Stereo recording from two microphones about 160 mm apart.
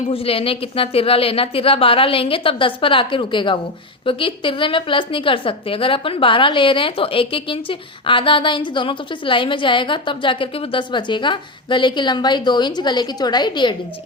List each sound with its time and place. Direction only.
0.1 s a woman's voice: 35° left (ahead or behind)